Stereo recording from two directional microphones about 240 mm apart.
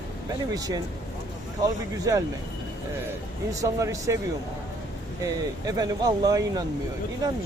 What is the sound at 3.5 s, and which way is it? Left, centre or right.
Speech, centre.